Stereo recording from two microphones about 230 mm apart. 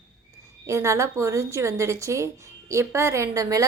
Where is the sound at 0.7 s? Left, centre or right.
Centre.